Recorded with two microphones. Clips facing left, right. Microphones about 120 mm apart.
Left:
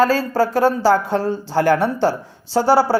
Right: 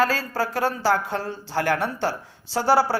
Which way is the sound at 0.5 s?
20° left (ahead or behind).